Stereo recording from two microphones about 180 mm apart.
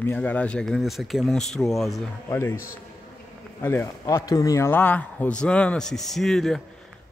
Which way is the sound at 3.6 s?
15° left (ahead or behind).